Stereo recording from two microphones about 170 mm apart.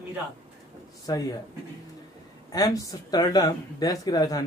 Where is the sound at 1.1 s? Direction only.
20° left (ahead or behind).